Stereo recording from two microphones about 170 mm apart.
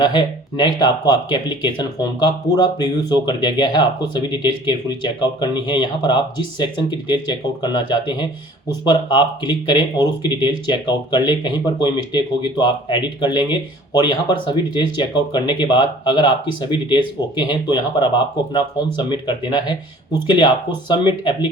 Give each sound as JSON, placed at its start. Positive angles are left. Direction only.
{"t": 0.0, "sound": "speech", "side_deg": 30}